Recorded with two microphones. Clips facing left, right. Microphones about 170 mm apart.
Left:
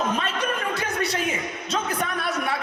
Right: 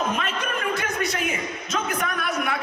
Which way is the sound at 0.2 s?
35° left (ahead or behind).